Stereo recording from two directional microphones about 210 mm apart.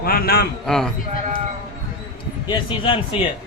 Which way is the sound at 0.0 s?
45° left (ahead or behind).